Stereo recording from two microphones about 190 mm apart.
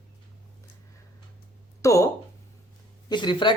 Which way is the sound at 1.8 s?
15° left (ahead or behind).